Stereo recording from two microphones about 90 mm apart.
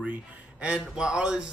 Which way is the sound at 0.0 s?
15° right (ahead or behind).